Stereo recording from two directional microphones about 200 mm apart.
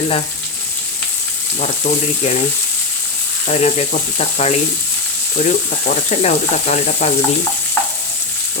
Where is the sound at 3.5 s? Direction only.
35° left (ahead or behind).